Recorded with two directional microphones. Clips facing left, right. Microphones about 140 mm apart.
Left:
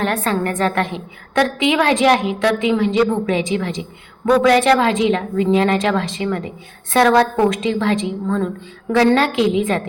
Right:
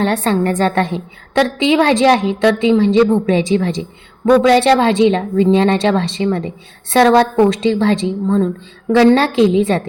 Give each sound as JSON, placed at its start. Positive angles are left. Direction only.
{"t": 0.0, "sound": "a woman's voice", "side_deg": -30}